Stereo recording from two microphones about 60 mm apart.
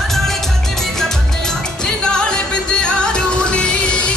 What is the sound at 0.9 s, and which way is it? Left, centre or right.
Music, centre.